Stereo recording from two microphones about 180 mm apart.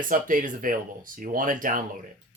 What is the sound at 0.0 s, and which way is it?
Speech, 50° right (ahead or behind).